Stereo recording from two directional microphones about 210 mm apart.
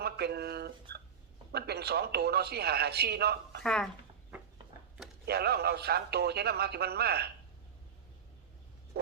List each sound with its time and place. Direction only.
0.0 s speech: 50° right (ahead or behind)
3.6 s speech: 5° left (ahead or behind)
5.2 s speech: 50° right (ahead or behind)